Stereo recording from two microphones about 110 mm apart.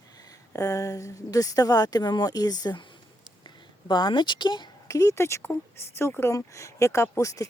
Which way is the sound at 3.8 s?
45° left (ahead or behind).